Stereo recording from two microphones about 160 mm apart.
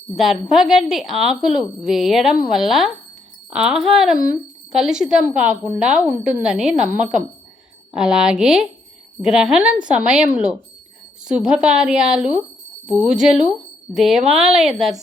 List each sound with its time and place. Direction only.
0.2 s speech: centre (ahead or behind)